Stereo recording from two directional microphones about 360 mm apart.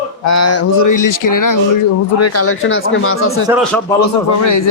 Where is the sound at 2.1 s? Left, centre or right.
Left.